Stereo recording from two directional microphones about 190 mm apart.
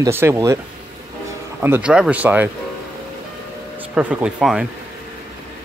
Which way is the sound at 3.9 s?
5° right (ahead or behind).